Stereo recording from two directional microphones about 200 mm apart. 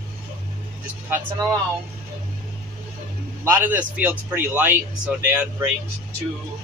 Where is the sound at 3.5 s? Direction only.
10° right (ahead or behind).